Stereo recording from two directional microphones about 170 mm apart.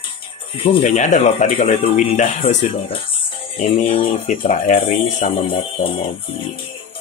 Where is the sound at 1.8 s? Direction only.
45° left (ahead or behind).